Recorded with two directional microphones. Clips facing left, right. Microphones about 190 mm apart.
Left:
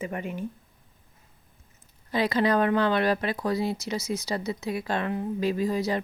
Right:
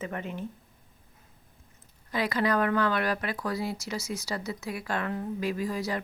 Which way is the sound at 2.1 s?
25° left (ahead or behind).